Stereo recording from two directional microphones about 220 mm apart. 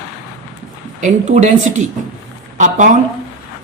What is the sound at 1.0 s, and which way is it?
Speech, 35° right (ahead or behind).